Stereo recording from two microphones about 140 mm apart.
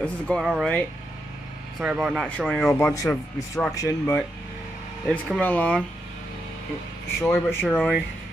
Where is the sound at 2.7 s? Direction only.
20° left (ahead or behind).